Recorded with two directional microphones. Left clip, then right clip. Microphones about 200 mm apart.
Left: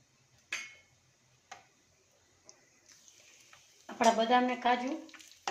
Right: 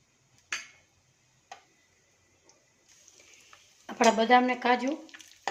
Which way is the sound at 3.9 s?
55° right (ahead or behind).